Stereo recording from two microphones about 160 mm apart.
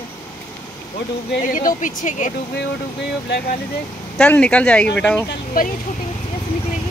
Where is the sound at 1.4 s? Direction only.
55° left (ahead or behind).